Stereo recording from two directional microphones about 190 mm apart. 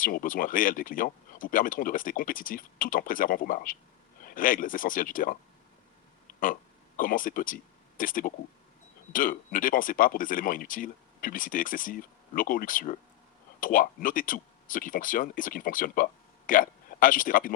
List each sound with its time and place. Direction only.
0.0 s speech: 45° left (ahead or behind)
6.4 s speech: 45° left (ahead or behind)